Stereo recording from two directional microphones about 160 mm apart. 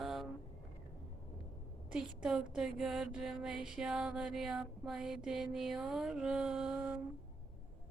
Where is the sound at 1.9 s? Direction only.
5° right (ahead or behind).